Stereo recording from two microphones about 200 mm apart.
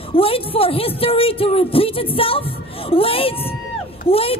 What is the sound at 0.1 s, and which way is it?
A woman's voice, 30° left (ahead or behind).